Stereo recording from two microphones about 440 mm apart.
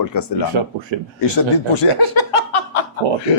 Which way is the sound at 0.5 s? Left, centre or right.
Right.